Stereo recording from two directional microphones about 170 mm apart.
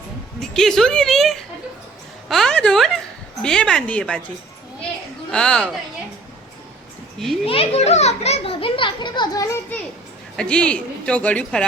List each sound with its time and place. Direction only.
0.3 s a woman's voice: centre (ahead or behind)
5.3 s a woman's voice: 5° left (ahead or behind)
7.4 s a child's voice: 35° left (ahead or behind)
10.3 s a woman's voice: 5° left (ahead or behind)